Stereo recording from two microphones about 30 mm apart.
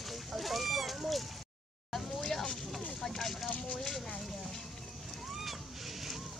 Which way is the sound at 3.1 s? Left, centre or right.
Centre.